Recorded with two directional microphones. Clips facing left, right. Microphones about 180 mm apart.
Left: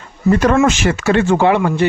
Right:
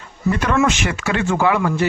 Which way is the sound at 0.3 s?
35° left (ahead or behind).